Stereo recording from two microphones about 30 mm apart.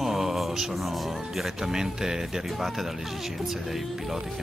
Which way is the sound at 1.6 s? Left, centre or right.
Centre.